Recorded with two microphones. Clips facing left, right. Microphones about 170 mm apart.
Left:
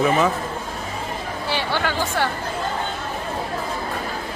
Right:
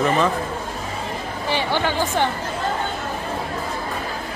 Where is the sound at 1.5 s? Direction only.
15° right (ahead or behind).